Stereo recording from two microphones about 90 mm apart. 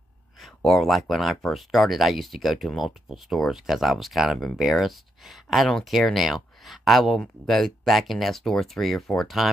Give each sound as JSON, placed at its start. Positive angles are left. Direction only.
{"t": 0.6, "sound": "speech", "side_deg": 0}